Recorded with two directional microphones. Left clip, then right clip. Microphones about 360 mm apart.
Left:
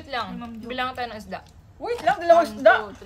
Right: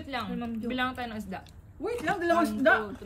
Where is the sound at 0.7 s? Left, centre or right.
Left.